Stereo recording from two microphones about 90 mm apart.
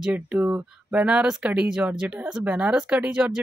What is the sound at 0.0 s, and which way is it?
Speech, 15° right (ahead or behind).